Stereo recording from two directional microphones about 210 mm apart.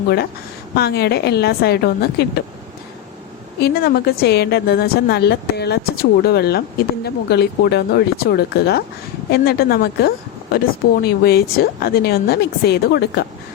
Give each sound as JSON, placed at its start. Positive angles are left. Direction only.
{"t": 0.8, "sound": "a woman's voice", "side_deg": 50}
{"t": 3.6, "sound": "a woman's voice", "side_deg": 45}